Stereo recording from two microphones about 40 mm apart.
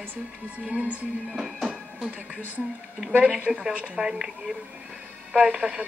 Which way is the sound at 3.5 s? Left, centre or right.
Right.